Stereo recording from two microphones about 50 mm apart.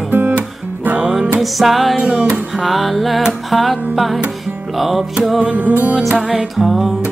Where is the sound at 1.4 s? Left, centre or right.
Centre.